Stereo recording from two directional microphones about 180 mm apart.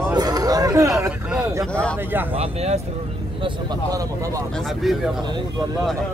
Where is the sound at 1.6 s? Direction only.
5° left (ahead or behind).